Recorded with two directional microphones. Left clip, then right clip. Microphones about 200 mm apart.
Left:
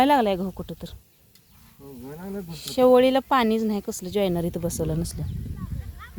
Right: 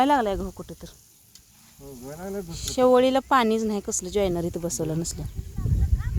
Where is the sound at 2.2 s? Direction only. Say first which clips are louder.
Right 3 dB; 20° right (ahead or behind).